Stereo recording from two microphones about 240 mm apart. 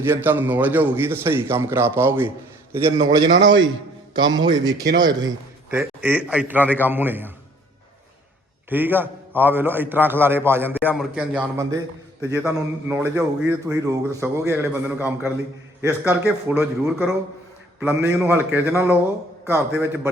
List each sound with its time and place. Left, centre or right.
0.0 s a man's voice: centre
8.7 s a man's voice: centre